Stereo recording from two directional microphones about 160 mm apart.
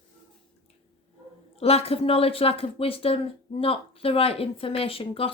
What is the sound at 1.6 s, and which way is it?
A woman's voice, 40° left (ahead or behind).